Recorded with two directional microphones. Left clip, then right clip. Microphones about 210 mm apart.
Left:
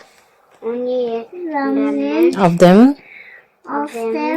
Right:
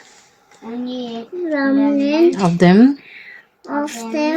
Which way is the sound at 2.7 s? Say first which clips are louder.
Left 2 dB; centre (ahead or behind).